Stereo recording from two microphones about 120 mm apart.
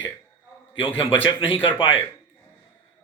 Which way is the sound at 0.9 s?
50° left (ahead or behind).